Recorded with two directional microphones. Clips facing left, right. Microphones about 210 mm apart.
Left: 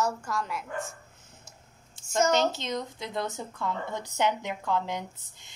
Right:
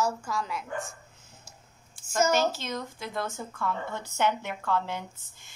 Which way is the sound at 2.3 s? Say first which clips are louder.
Left 1 dB; 20° left (ahead or behind).